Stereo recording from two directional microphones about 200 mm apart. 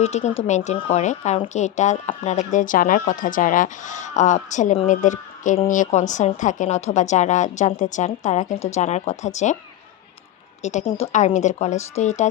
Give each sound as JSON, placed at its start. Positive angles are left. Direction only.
{"t": 0.0, "sound": "speech", "side_deg": 35}
{"t": 10.6, "sound": "speech", "side_deg": 35}